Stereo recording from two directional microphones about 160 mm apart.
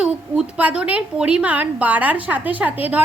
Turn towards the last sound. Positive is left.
turn(degrees=-10)  # may be behind; listen again after turning